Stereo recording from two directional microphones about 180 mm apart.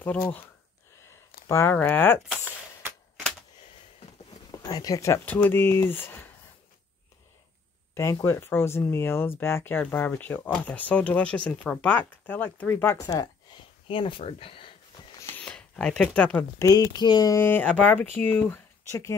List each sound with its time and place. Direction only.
1.5 s speech: 15° left (ahead or behind)
4.5 s speech: 20° left (ahead or behind)
7.9 s speech: 15° left (ahead or behind)
15.3 s speech: 5° left (ahead or behind)